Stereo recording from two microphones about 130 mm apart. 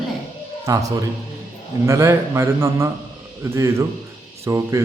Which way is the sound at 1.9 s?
20° right (ahead or behind).